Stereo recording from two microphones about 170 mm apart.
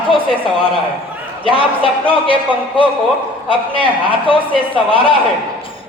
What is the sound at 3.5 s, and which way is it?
A man's voice, 30° left (ahead or behind).